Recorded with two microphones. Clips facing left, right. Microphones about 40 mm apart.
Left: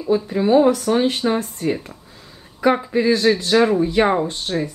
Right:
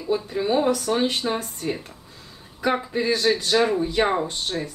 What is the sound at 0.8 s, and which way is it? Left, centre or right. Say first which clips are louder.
Speech: left 5 dB; left.